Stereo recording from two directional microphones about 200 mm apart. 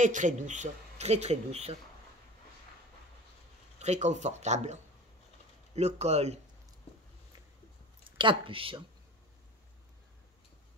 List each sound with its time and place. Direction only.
0.0 s speech: 40° right (ahead or behind)
3.8 s speech: 35° right (ahead or behind)
5.8 s speech: 35° right (ahead or behind)
8.2 s speech: 25° right (ahead or behind)